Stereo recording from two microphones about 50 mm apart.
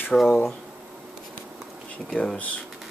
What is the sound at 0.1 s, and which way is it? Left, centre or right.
Speech, centre.